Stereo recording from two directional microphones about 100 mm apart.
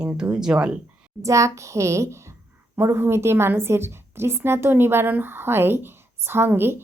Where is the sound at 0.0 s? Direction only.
10° right (ahead or behind).